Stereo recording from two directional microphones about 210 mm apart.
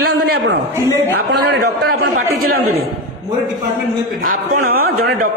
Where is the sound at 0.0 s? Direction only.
50° right (ahead or behind).